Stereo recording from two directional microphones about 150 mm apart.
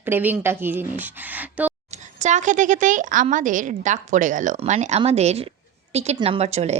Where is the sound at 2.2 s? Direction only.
55° right (ahead or behind).